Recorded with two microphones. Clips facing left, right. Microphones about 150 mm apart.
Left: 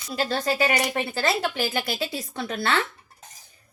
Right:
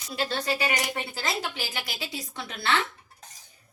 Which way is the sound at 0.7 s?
65° left (ahead or behind).